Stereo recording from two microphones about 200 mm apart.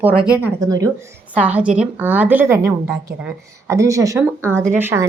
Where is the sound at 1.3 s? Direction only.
5° right (ahead or behind).